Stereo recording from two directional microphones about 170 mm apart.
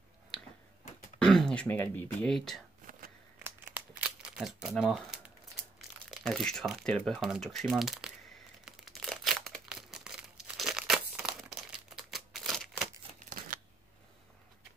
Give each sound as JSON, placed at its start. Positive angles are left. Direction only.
{"t": 1.2, "sound": "speech", "side_deg": 5}
{"t": 3.4, "sound": "crumpling", "side_deg": -10}
{"t": 6.0, "sound": "speech", "side_deg": 0}
{"t": 8.6, "sound": "crumpling", "side_deg": 0}
{"t": 13.2, "sound": "a sound", "side_deg": -55}